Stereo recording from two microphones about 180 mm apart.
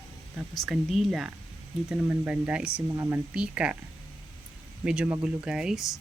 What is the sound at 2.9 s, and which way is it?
Speech, 15° right (ahead or behind).